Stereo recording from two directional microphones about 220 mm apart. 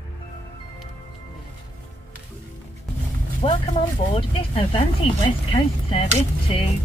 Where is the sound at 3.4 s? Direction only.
25° left (ahead or behind).